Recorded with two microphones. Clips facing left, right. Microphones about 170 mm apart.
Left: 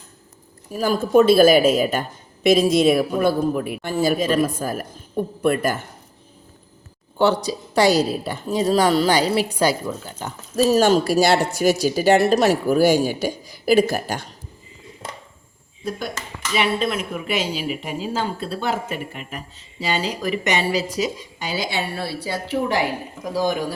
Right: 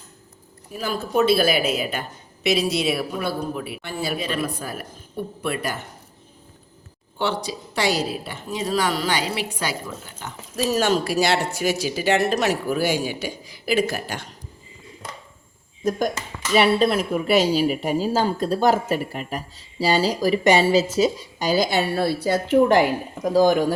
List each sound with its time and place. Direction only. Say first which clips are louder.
0.7 s a woman's voice: left 7 dB; 45° left (ahead or behind)
7.2 s a woman's voice: left 6 dB; 40° left (ahead or behind)
15.8 s speech: right 5 dB; 45° right (ahead or behind)